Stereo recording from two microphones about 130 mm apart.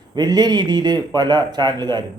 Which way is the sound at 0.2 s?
30° right (ahead or behind).